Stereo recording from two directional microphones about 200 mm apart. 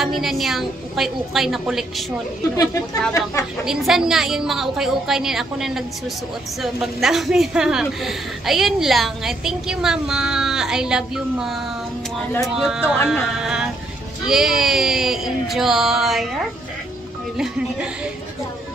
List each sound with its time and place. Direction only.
0.0 s a woman's voice: centre (ahead or behind)
2.5 s a woman's voice: 15° left (ahead or behind)
3.6 s a woman's voice: centre (ahead or behind)
12.5 s a woman's voice: centre (ahead or behind)